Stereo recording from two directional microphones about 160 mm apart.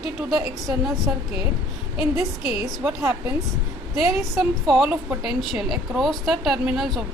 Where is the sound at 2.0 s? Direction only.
15° right (ahead or behind).